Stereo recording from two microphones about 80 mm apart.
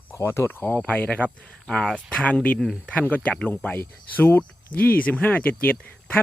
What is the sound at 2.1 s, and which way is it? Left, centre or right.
Speech, centre.